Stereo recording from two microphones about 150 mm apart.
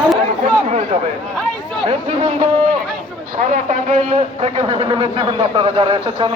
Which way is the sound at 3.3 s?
60° right (ahead or behind).